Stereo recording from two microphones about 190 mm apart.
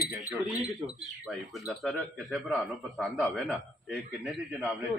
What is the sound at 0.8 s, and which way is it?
Speech, 20° right (ahead or behind).